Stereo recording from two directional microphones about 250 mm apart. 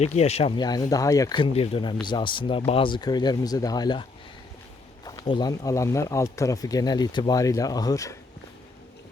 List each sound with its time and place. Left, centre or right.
0.0 s speech: left
5.0 s speech: centre